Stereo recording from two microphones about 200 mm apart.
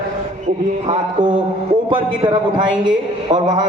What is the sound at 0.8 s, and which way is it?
A man's voice, 25° right (ahead or behind).